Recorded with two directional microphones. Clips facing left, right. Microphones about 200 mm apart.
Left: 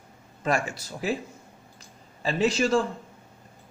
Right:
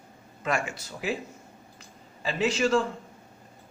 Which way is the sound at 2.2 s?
40° left (ahead or behind).